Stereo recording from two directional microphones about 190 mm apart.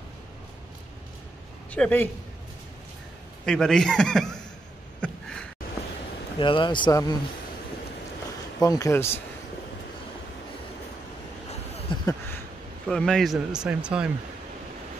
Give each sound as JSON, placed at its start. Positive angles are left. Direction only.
{"t": 1.7, "sound": "speech", "side_deg": 10}
{"t": 3.4, "sound": "speech", "side_deg": 5}
{"t": 5.0, "sound": "a sound", "side_deg": 5}
{"t": 6.4, "sound": "speech", "side_deg": 25}
{"t": 8.5, "sound": "speech", "side_deg": 20}
{"t": 11.9, "sound": "a sound", "side_deg": 15}
{"t": 12.8, "sound": "speech", "side_deg": 5}